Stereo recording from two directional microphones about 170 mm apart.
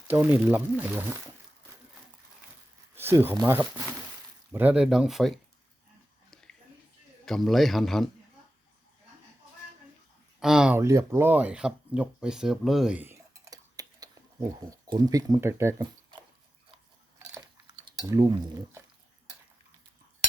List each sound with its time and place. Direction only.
0.1 s speech: 10° right (ahead or behind)
2.9 s a sound: 15° right (ahead or behind)
3.4 s a man's voice: 10° right (ahead or behind)
6.3 s a sound: 5° left (ahead or behind)
7.3 s a man's voice: centre (ahead or behind)
10.4 s a man's voice: 5° right (ahead or behind)
10.8 s speech: 15° right (ahead or behind)
17.2 s biting: 15° right (ahead or behind)
17.8 s cutlery: 25° right (ahead or behind)